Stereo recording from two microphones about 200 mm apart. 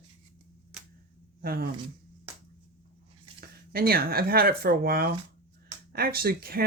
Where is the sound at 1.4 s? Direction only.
50° right (ahead or behind).